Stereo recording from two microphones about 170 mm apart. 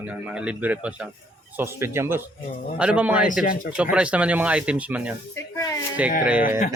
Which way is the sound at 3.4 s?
55° left (ahead or behind).